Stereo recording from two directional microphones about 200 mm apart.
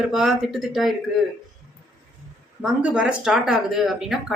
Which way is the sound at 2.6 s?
5° right (ahead or behind).